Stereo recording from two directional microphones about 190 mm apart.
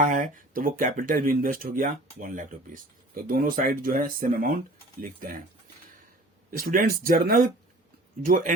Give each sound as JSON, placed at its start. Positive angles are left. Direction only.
{"t": 0.1, "sound": "speech", "side_deg": -45}
{"t": 6.6, "sound": "speech", "side_deg": -50}